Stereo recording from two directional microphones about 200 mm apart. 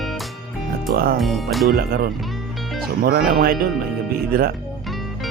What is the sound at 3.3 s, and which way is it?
Speech, 45° right (ahead or behind).